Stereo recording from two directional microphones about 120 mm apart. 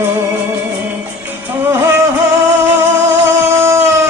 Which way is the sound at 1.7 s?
20° right (ahead or behind).